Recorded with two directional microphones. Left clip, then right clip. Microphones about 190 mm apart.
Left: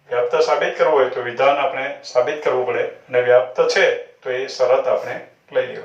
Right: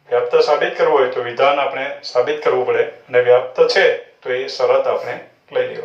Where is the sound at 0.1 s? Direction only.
35° right (ahead or behind).